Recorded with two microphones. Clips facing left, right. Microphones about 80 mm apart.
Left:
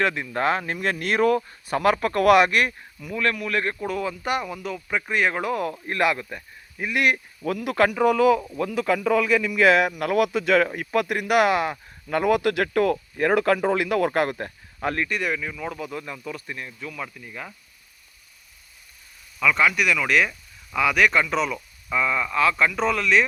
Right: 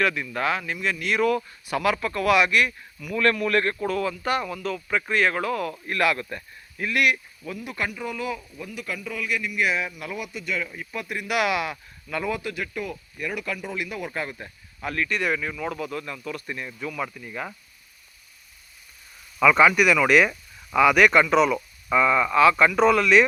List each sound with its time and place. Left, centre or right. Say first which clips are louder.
0.0 s speech: left 1 dB; left
3.2 s speech: right 3 dB; centre; by 6.1 s left
6.1 s speech: right 1 dB; centre
7.4 s speech: left 9 dB; left
9.7 s speech: left 10 dB; left
12.3 s speech: left 9 dB; left
15.1 s speech: right 1 dB; centre
15.9 s speech: right 1 dB; centre
16.5 s speech: right 2 dB; centre
19.4 s speech: right 4 dB; centre